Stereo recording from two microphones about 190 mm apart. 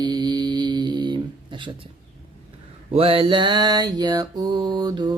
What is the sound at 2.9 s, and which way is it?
Mantra, 30° right (ahead or behind).